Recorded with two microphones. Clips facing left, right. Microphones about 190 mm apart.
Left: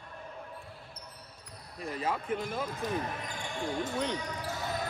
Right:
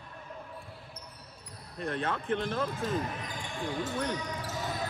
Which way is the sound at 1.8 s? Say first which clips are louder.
Right 1 dB; 5° left (ahead or behind).